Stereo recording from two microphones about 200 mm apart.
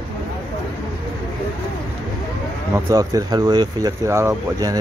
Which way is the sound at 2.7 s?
15° right (ahead or behind).